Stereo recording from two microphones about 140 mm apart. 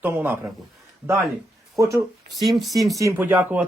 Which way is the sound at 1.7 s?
25° right (ahead or behind).